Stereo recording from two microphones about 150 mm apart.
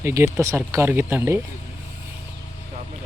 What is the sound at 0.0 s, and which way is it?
Speech, 20° right (ahead or behind).